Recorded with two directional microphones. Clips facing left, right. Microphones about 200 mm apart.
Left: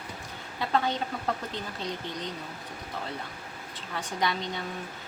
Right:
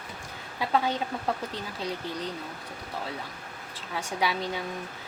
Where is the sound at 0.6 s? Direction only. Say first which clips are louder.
Right 1 dB; 10° right (ahead or behind).